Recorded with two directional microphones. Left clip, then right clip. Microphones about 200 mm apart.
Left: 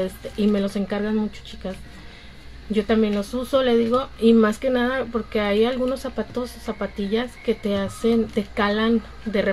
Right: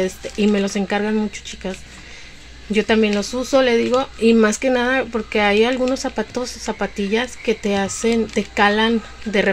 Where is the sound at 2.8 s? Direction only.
35° right (ahead or behind).